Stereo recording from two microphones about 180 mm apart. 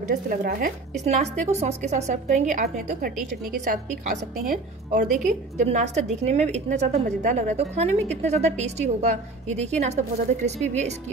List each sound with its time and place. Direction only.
0.1 s speech: 55° right (ahead or behind)
1.0 s a woman's voice: 40° right (ahead or behind)
5.1 s a woman's voice: 40° right (ahead or behind)